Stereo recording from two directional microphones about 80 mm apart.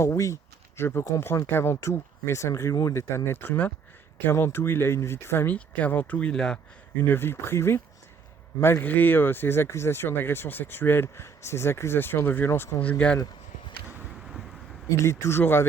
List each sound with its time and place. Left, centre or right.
0.0 s speech: left
5.5 s speech: centre
7.1 s speech: left
12.8 s speech: centre
14.8 s speech: left